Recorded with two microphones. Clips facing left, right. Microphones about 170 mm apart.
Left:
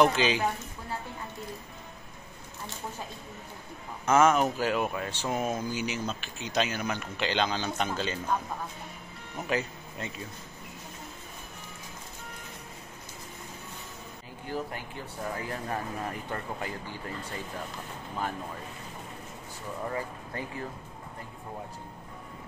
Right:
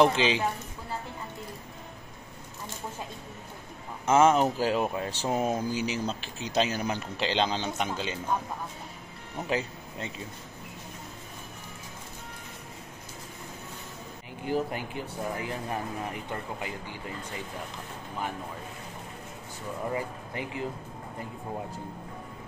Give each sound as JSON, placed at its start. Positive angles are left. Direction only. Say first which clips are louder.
{"t": 0.0, "sound": "a woman's voice", "louder": "right 1 dB", "side_deg": -25}
{"t": 4.0, "sound": "speech", "louder": "right 1 dB", "side_deg": -25}
{"t": 7.7, "sound": "speech", "louder": "left 1 dB", "side_deg": -15}
{"t": 9.5, "sound": "speech", "louder": "even", "side_deg": -30}
{"t": 14.4, "sound": "speech", "louder": "right 6 dB", "side_deg": -15}
{"t": 19.9, "sound": "speech", "louder": "right 2 dB", "side_deg": -15}